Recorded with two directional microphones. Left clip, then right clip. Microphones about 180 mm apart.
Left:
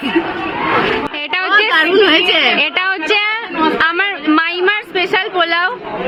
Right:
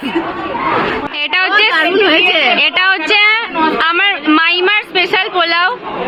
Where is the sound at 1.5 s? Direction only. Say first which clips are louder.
Left 2 dB; 65° left (ahead or behind).